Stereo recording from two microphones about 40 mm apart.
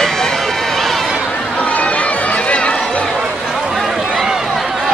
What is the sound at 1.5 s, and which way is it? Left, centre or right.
Run, left.